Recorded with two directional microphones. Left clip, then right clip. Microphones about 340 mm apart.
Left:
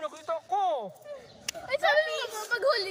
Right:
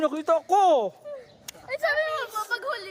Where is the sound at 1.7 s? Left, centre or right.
Centre.